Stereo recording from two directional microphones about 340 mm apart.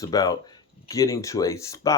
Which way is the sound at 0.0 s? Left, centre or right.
Centre.